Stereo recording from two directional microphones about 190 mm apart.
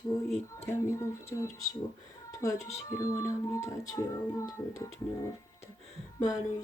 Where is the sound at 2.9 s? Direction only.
15° left (ahead or behind).